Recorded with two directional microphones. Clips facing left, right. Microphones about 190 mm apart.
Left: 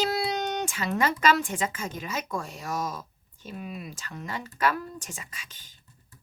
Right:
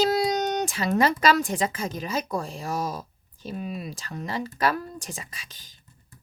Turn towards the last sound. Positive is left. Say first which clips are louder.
# right 3 dB
turn(degrees=-35)  # may be behind; listen again after turning